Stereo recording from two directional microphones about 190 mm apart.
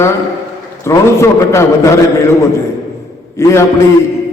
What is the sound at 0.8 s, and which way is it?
Speech, 15° left (ahead or behind).